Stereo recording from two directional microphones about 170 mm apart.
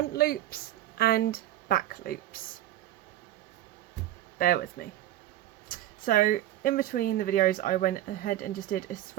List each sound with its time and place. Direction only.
0.1 s a woman's voice: 65° left (ahead or behind)
4.4 s speech: 55° left (ahead or behind)